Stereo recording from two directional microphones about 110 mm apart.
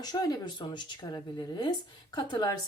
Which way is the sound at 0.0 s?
35° left (ahead or behind).